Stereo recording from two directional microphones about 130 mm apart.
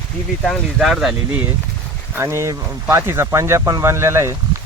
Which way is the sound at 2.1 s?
20° right (ahead or behind).